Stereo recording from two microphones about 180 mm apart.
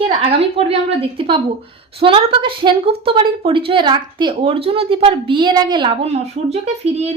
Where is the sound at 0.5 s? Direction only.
30° right (ahead or behind).